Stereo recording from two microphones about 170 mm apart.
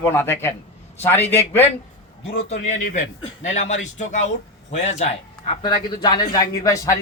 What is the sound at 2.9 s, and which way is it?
A man's voice, 45° left (ahead or behind).